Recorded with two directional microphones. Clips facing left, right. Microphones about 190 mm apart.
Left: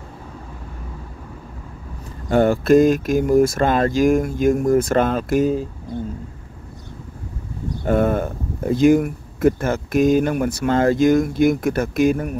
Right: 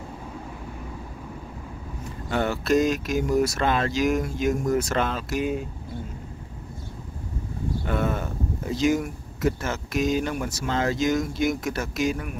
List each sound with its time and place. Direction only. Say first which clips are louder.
2.2 s speech: left 9 dB; 50° left (ahead or behind)
7.8 s speech: left 10 dB; 50° left (ahead or behind)